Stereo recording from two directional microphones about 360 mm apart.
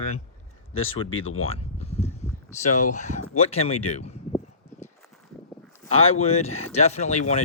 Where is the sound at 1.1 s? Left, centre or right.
Left.